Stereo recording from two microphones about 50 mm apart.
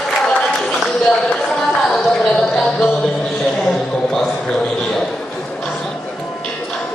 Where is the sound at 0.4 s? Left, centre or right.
Centre.